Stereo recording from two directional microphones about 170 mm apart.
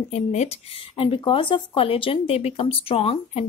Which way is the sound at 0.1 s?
40° left (ahead or behind).